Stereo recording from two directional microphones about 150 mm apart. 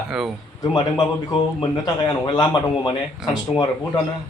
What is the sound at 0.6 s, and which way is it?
Speech, 25° left (ahead or behind).